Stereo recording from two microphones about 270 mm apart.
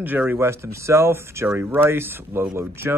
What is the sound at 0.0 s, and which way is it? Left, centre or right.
Speech, centre.